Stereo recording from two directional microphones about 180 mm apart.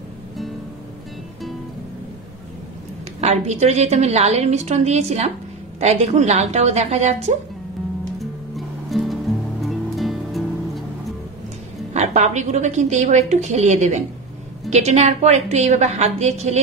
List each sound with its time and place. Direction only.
3.2 s a woman's voice: 40° right (ahead or behind)
8.2 s music: centre (ahead or behind)
11.9 s a woman's voice: 40° right (ahead or behind)